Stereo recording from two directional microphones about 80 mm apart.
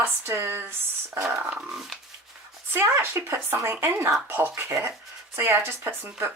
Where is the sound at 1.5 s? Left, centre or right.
Centre.